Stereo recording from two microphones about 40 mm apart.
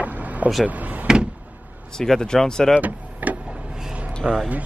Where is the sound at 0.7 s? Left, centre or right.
Right.